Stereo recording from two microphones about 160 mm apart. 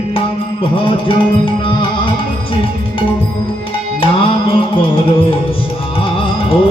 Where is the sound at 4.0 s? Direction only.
30° left (ahead or behind).